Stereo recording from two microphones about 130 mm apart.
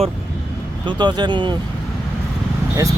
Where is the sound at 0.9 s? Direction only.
35° right (ahead or behind).